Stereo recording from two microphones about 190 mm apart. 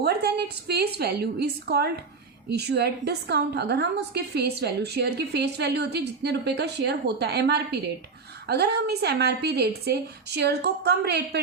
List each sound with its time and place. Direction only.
0.0 s a woman's voice: 55° right (ahead or behind)